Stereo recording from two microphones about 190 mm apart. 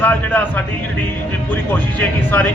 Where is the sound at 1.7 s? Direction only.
10° left (ahead or behind).